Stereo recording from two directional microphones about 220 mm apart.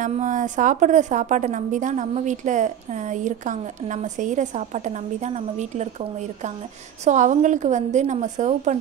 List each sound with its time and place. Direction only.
0.0 s a woman's voice: 35° right (ahead or behind)